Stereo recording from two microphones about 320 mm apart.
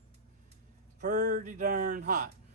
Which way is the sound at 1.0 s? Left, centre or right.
Right.